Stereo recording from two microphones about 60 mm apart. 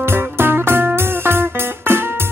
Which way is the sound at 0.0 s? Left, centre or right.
Right.